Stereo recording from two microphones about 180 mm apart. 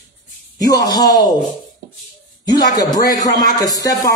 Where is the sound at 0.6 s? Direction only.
20° left (ahead or behind).